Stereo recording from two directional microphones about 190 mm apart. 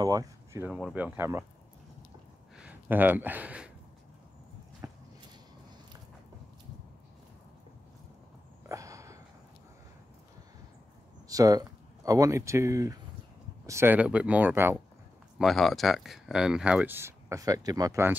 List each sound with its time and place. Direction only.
0.0 s speech: 20° right (ahead or behind)
2.5 s speech: 5° right (ahead or behind)
4.8 s walk: 15° right (ahead or behind)
8.6 s a sound: 15° right (ahead or behind)
11.2 s speech: 20° right (ahead or behind)
15.3 s speech: centre (ahead or behind); by 18.1 s 15° right (ahead or behind)